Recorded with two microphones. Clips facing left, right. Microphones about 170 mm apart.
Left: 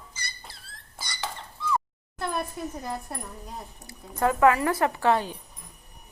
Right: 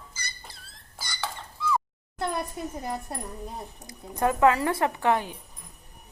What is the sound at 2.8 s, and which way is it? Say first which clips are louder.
Speech: right 1 dB; 20° right (ahead or behind).